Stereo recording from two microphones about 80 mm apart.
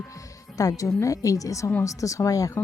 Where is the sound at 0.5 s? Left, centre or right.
Left.